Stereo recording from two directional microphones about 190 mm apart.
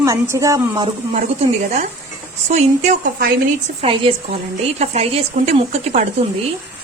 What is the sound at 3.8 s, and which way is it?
A woman's voice, 25° right (ahead or behind).